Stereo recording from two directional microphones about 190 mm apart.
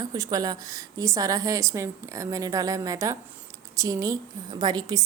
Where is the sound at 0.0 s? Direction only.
20° right (ahead or behind).